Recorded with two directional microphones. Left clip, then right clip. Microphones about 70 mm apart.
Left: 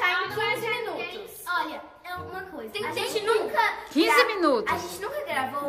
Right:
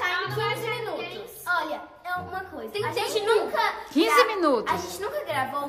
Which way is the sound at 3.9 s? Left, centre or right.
Right.